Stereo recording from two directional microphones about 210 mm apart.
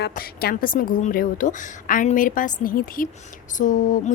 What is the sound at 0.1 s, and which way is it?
A woman's voice, 45° left (ahead or behind).